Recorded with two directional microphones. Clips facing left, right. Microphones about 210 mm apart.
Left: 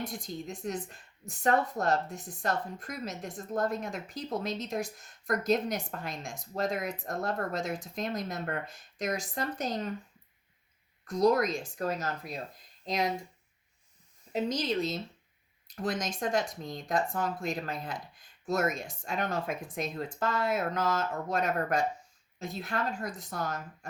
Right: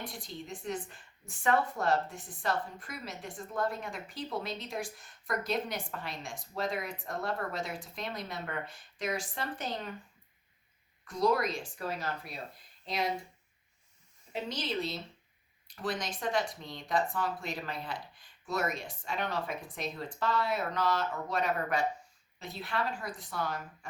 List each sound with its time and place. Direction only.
0.0 s a woman's voice: 45° left (ahead or behind)
11.0 s a woman's voice: 45° left (ahead or behind)
14.3 s a woman's voice: 40° left (ahead or behind)